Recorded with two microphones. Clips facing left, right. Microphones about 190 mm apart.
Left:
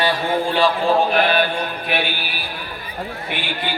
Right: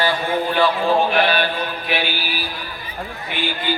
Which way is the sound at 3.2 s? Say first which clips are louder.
Right 5 dB; 65° left (ahead or behind).